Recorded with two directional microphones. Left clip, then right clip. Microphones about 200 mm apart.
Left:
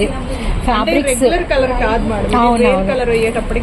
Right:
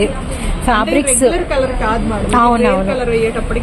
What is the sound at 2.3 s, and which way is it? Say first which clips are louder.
Speech: right 2 dB; 5° right (ahead or behind).